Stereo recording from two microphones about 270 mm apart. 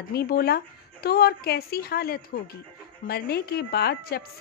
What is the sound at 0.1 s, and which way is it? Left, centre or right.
A woman's voice, left.